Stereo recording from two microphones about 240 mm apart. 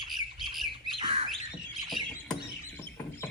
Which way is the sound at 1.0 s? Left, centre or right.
Right.